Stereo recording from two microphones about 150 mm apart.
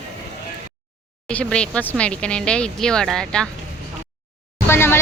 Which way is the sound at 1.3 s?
5° left (ahead or behind).